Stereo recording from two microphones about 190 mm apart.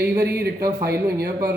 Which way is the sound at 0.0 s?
55° right (ahead or behind).